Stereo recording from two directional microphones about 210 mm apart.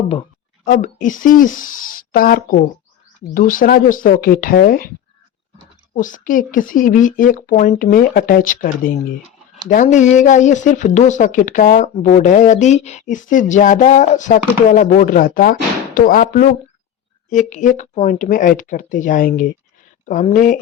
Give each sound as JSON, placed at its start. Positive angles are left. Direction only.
{"t": 0.6, "sound": "speech", "side_deg": 40}
{"t": 5.9, "sound": "speech", "side_deg": 40}